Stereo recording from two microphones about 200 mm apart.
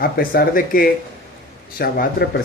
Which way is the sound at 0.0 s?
45° left (ahead or behind).